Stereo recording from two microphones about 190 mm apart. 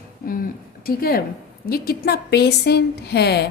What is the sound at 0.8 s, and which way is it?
A woman's voice, 50° left (ahead or behind).